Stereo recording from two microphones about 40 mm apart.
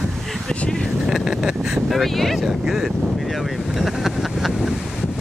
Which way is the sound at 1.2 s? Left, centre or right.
Centre.